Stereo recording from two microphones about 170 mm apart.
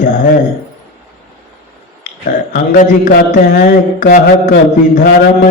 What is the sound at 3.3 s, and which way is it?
Mantra, 50° left (ahead or behind).